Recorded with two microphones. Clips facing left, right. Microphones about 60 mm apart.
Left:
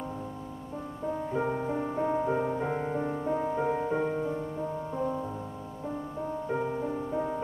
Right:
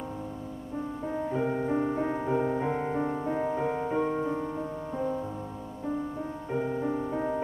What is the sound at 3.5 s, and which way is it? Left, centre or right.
Music, centre.